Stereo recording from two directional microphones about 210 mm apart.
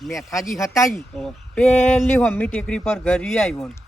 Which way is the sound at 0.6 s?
15° left (ahead or behind).